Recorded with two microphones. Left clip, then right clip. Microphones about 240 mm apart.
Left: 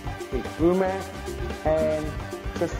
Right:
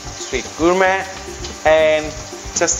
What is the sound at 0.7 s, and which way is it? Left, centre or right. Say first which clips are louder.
Speech: right 13 dB; centre.